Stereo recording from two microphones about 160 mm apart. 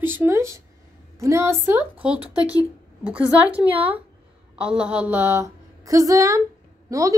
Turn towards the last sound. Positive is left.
turn(degrees=-20)  # may be behind; listen again after turning